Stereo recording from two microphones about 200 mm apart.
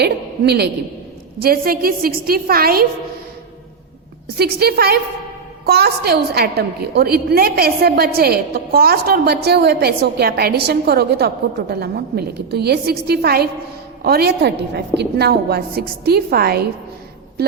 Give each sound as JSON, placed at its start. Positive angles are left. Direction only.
{"t": 0.0, "sound": "a man's voice", "side_deg": -55}
{"t": 4.4, "sound": "a woman's voice", "side_deg": -50}